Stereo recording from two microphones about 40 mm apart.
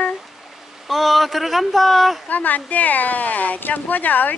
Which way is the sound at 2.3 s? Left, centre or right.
Left.